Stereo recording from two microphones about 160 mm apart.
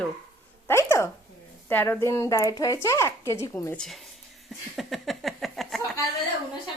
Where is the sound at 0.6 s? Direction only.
15° left (ahead or behind).